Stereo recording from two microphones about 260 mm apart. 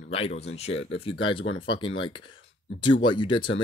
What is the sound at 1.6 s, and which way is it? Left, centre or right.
Speech, centre.